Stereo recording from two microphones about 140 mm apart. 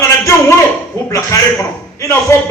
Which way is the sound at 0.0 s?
20° left (ahead or behind).